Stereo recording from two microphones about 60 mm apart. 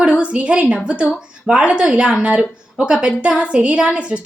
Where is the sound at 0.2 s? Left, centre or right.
Centre.